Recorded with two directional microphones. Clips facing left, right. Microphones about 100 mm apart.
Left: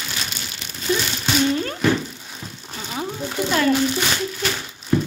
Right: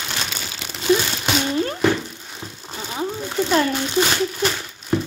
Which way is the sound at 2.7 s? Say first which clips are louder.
Even; 5° right (ahead or behind).